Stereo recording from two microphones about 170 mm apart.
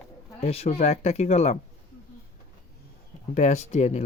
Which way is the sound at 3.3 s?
45° left (ahead or behind).